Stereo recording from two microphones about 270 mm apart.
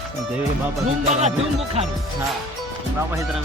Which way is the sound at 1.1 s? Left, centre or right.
Right.